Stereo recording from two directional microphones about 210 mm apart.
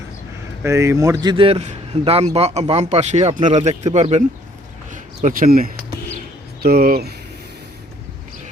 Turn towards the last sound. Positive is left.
turn(degrees=-45)  # may be behind; listen again after turning